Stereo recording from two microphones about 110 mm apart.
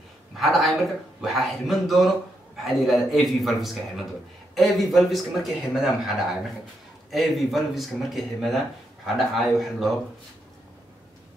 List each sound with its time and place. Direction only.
0.4 s a man's voice: centre (ahead or behind)